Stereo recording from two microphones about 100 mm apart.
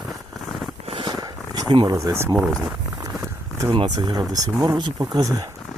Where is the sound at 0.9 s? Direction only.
50° right (ahead or behind).